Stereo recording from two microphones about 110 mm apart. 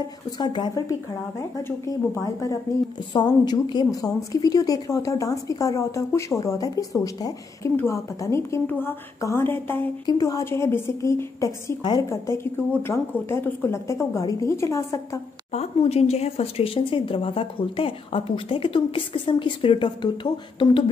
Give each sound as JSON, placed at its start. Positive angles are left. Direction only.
{"t": 0.4, "sound": "speech", "side_deg": 45}
{"t": 1.9, "sound": "a woman's voice", "side_deg": 30}
{"t": 3.1, "sound": "a woman's voice", "side_deg": 40}
{"t": 10.0, "sound": "a woman's voice", "side_deg": 35}
{"t": 12.8, "sound": "a woman's voice", "side_deg": 25}
{"t": 15.5, "sound": "speech", "side_deg": 70}